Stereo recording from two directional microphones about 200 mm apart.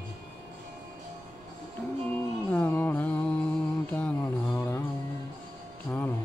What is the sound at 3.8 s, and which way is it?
Mantra, 5° left (ahead or behind).